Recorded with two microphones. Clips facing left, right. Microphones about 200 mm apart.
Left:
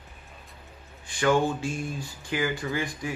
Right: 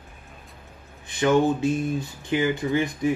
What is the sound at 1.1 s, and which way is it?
Speech, 20° right (ahead or behind).